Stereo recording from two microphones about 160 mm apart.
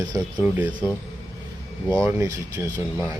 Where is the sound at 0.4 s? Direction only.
10° right (ahead or behind).